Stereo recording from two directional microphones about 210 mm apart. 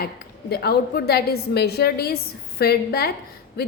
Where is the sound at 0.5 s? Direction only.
50° left (ahead or behind).